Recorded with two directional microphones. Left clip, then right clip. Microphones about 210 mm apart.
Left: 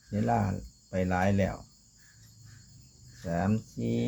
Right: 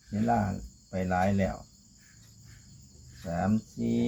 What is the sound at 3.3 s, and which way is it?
Speech, 50° left (ahead or behind).